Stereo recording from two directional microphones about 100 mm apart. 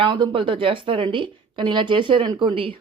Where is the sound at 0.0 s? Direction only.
55° right (ahead or behind).